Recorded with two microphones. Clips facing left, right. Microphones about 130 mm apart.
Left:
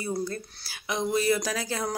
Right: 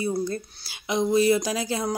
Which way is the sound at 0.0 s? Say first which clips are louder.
Right 4 dB; 20° right (ahead or behind).